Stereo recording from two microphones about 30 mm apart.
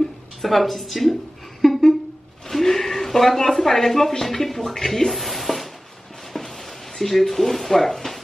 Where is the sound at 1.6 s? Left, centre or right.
Centre.